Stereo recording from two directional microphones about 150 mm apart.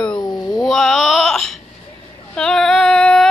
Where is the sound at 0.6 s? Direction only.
5° left (ahead or behind).